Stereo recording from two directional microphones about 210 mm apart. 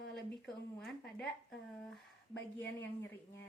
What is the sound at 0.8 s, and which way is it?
Speech, centre (ahead or behind).